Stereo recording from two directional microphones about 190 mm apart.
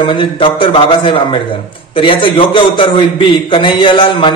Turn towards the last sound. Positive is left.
turn(degrees=25)  # may be behind; listen again after turning